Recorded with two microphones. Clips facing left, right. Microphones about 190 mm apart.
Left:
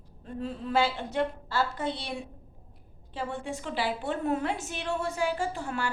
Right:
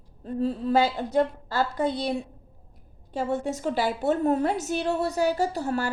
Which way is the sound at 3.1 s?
40° right (ahead or behind).